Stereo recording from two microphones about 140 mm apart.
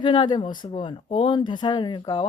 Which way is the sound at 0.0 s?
35° left (ahead or behind).